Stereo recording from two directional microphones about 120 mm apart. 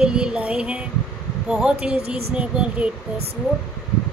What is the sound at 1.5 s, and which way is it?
Speech, 5° right (ahead or behind).